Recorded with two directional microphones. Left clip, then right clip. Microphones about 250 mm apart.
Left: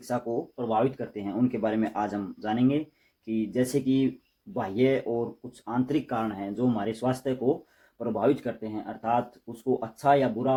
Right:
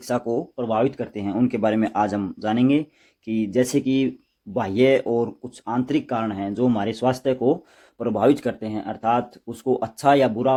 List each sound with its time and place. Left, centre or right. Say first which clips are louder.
0.1 s speech: right 6 dB; right